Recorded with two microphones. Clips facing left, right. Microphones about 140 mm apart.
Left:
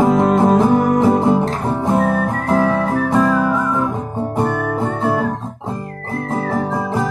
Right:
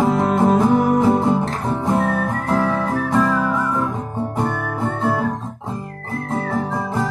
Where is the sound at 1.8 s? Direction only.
20° left (ahead or behind).